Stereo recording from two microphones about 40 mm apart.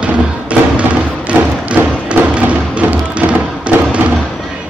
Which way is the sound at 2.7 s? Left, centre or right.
Right.